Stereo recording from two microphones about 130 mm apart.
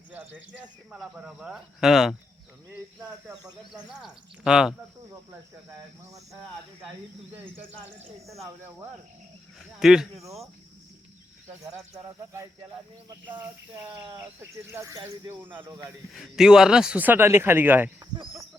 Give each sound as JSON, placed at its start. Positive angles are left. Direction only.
{"t": 0.1, "sound": "speech", "side_deg": -10}
{"t": 9.6, "sound": "speech", "side_deg": -5}
{"t": 12.0, "sound": "speech", "side_deg": -20}
{"t": 14.5, "sound": "speech", "side_deg": -20}
{"t": 16.1, "sound": "speech", "side_deg": 0}